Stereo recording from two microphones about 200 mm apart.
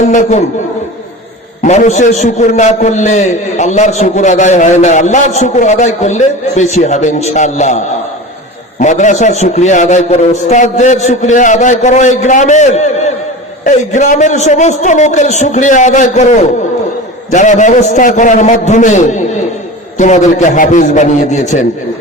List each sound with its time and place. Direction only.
0.1 s a man's voice: 35° left (ahead or behind)
1.6 s a man's voice: 35° left (ahead or behind)